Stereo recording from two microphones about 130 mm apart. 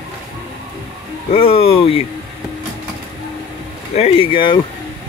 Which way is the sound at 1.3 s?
45° left (ahead or behind).